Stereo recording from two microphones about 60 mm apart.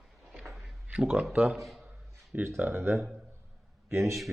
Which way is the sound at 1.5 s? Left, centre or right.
Centre.